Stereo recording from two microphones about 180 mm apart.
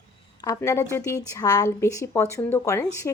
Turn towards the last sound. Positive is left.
turn(degrees=15)  # may be behind; listen again after turning